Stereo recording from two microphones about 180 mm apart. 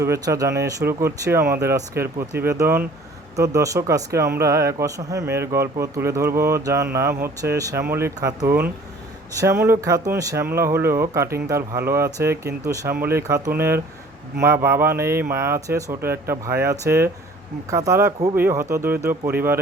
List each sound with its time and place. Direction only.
0.0 s speech: 15° right (ahead or behind)